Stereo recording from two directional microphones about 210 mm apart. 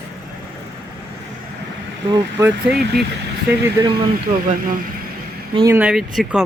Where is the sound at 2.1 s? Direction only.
15° right (ahead or behind).